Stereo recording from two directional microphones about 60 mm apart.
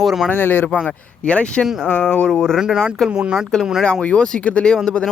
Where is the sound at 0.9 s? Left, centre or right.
Centre.